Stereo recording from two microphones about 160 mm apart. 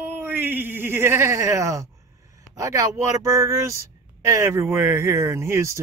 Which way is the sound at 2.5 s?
20° right (ahead or behind).